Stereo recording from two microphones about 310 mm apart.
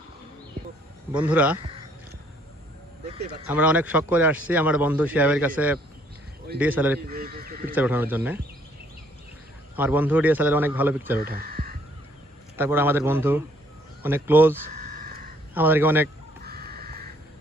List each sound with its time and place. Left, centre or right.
1.1 s a man's voice: centre
3.4 s a man's voice: centre
7.0 s speech: right
7.8 s a man's voice: centre
9.7 s a man's voice: centre
11.2 s speech: right
12.5 s a man's voice: centre
14.8 s a sound: right
15.5 s a man's voice: centre
16.4 s crow: right